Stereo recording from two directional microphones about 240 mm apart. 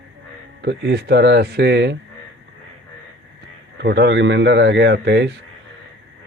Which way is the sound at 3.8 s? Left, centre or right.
Right.